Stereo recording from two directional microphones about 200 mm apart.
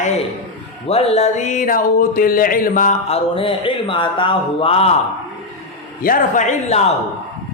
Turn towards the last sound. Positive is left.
turn(degrees=35)  # may be behind; listen again after turning